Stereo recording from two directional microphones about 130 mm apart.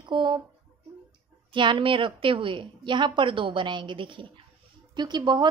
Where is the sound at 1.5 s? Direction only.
40° right (ahead or behind).